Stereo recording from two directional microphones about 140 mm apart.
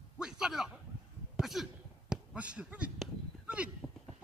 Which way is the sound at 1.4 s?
Centre (ahead or behind).